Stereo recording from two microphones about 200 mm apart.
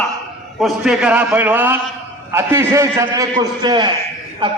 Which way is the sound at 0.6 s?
5° right (ahead or behind).